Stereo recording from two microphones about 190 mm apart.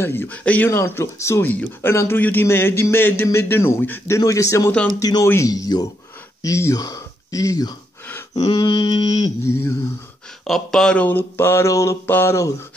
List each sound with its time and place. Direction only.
0.0 s speech: 10° left (ahead or behind)
10.4 s speech: centre (ahead or behind)